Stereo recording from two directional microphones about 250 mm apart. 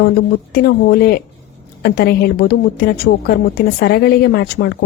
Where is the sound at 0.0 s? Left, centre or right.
Left.